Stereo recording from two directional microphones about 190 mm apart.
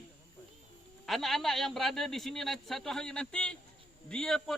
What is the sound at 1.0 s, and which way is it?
A man's voice, centre (ahead or behind).